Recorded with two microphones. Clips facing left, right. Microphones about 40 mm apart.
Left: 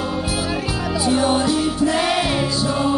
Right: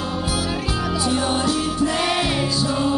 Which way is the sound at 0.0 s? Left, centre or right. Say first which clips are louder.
Left 1 dB; centre.